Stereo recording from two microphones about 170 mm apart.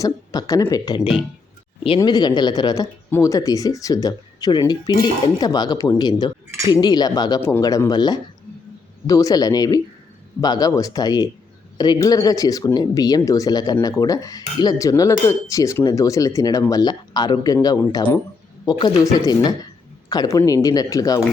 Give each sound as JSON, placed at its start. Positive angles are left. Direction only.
{"t": 0.0, "sound": "speech", "side_deg": 20}